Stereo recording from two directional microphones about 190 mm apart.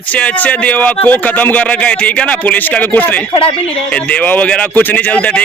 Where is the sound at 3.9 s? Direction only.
5° left (ahead or behind).